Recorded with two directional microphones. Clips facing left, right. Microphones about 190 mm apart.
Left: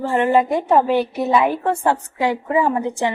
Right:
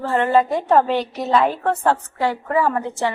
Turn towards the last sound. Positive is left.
turn(degrees=15)  # may be behind; listen again after turning